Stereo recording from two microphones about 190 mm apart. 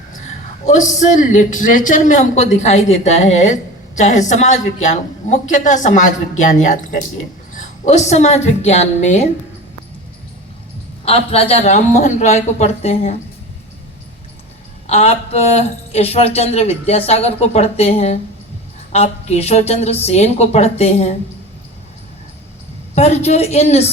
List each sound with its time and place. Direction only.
0.6 s a woman's voice: 40° left (ahead or behind)
11.0 s speech: 30° left (ahead or behind)
14.8 s speech: 35° left (ahead or behind)
23.0 s speech: 35° left (ahead or behind)